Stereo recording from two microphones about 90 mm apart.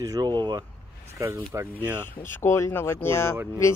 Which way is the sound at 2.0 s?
25° left (ahead or behind).